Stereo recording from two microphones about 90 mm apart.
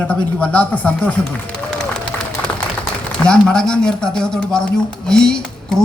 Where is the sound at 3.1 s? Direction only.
10° left (ahead or behind).